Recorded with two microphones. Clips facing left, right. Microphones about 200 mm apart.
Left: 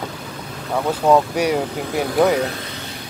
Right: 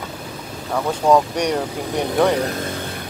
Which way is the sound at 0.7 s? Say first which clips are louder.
Even; 5° left (ahead or behind).